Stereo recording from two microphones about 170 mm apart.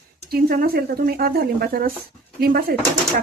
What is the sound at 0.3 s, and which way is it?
Speech, 60° right (ahead or behind).